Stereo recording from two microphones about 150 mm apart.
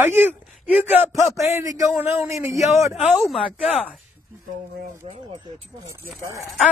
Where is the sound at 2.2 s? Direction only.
20° right (ahead or behind).